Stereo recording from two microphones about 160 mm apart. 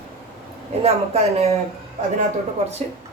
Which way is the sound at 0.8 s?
40° right (ahead or behind).